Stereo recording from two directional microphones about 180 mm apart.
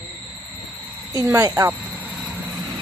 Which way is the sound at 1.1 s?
20° right (ahead or behind).